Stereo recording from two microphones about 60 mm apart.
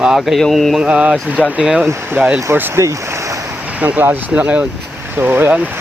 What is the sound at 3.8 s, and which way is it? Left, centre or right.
Speech, right.